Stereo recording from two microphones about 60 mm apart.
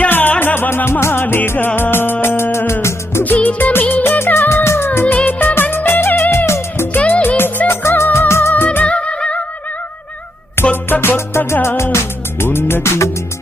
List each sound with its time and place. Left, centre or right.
0.1 s music: left
0.9 s music: left
3.2 s music: left
5.1 s music of bollywood: left
5.7 s music: left
7.1 s music: left
8.9 s music: centre
10.5 s music: left
11.0 s music: left